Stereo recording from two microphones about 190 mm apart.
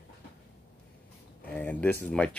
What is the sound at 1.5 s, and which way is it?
Speech, 10° left (ahead or behind).